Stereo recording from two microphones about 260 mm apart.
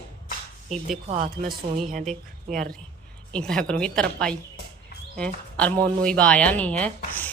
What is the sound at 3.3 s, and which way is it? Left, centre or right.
Speech, centre.